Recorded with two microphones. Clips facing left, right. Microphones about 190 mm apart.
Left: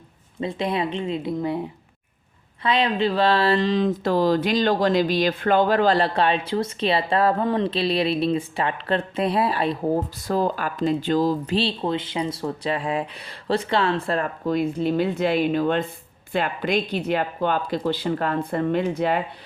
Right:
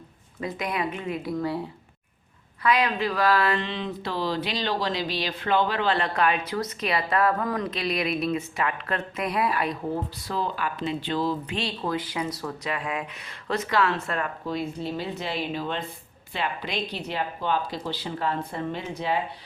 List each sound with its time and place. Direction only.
0.3 s speech: 25° left (ahead or behind)
2.6 s speech: 25° left (ahead or behind)
9.9 s speech: 45° left (ahead or behind)
14.4 s speech: 55° left (ahead or behind)